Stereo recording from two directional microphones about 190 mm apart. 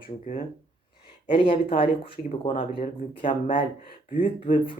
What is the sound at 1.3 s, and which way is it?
Speech, 30° left (ahead or behind).